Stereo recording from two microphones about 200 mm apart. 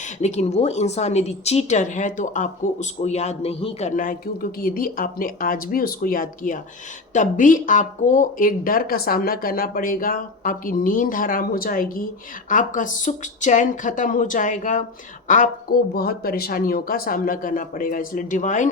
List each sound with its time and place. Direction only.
0.2 s speech: 35° left (ahead or behind)